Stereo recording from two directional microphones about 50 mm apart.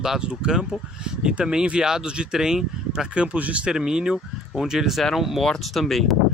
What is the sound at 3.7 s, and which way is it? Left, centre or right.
Speech, centre.